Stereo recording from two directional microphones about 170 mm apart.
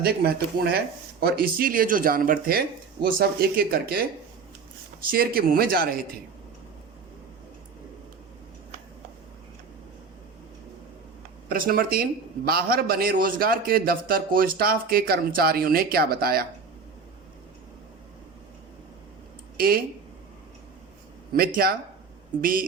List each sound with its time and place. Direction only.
0.0 s a man's voice: 60° right (ahead or behind)
5.1 s a man's voice: 65° right (ahead or behind)
11.4 s a man's voice: 60° right (ahead or behind)
19.5 s speech: 60° right (ahead or behind)
21.3 s a man's voice: 60° right (ahead or behind)